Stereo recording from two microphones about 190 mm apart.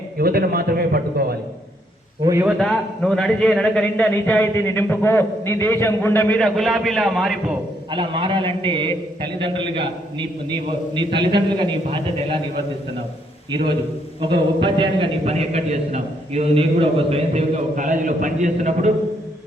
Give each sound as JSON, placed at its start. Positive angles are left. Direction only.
{"t": 0.2, "sound": "a man's voice", "side_deg": -55}
{"t": 2.2, "sound": "a man's voice", "side_deg": -15}
{"t": 2.6, "sound": "speech", "side_deg": 5}
{"t": 7.9, "sound": "a man's voice", "side_deg": -25}
{"t": 10.9, "sound": "a man's voice", "side_deg": -25}
{"t": 14.2, "sound": "a man's voice", "side_deg": -25}